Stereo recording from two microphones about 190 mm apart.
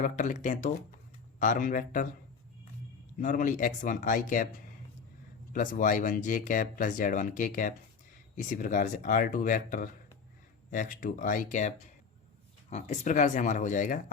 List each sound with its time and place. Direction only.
0.0 s speech: 40° left (ahead or behind)
3.2 s speech: 45° left (ahead or behind)
5.5 s speech: 45° left (ahead or behind)
12.7 s speech: 40° left (ahead or behind)